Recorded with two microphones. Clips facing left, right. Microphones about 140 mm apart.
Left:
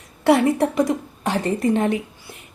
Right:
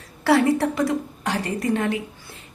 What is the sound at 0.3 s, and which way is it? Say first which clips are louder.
A woman's voice: left 2 dB; 20° left (ahead or behind).